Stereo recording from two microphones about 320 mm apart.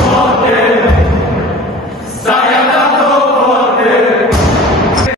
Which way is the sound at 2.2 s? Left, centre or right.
Centre.